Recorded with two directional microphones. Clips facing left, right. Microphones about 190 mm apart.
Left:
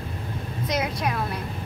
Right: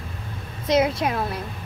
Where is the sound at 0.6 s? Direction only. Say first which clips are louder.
Right 7 dB; 25° right (ahead or behind).